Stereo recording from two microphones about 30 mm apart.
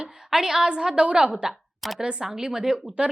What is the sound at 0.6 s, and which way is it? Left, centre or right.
A woman's voice, right.